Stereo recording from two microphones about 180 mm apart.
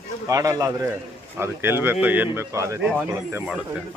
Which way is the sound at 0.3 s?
20° right (ahead or behind).